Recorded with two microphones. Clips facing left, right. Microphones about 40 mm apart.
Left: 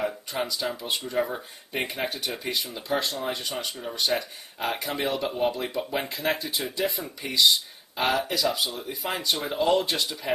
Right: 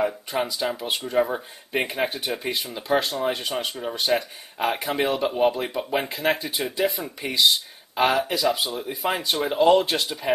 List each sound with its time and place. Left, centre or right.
0.0 s speech: centre
6.6 s speech: centre
9.6 s speech: right